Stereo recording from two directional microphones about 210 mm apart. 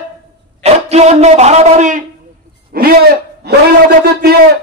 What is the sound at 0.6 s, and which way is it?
A man's voice, 30° right (ahead or behind).